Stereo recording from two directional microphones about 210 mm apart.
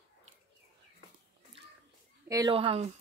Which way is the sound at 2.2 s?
15° right (ahead or behind).